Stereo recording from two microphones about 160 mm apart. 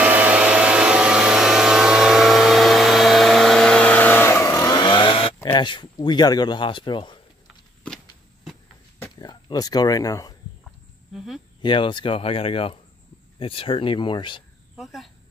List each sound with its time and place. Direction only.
0.0 s hair dryer: 10° right (ahead or behind); by 5.3 s 35° left (ahead or behind)
5.5 s speech: 30° left (ahead or behind)
7.4 s a sound: 5° left (ahead or behind)
9.1 s speech: 25° left (ahead or behind)
11.1 s speech: centre (ahead or behind)
11.6 s speech: 30° left (ahead or behind)
14.8 s speech: centre (ahead or behind)